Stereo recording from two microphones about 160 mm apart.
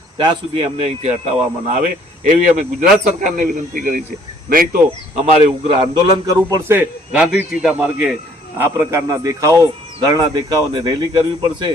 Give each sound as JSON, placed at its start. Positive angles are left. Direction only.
{"t": 0.2, "sound": "speech", "side_deg": -35}
{"t": 5.1, "sound": "speech", "side_deg": -45}
{"t": 5.8, "sound": "a man's voice", "side_deg": -25}
{"t": 6.7, "sound": "a man's voice", "side_deg": -10}